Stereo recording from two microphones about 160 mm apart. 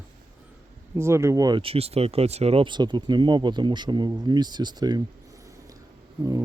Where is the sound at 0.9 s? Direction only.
15° right (ahead or behind).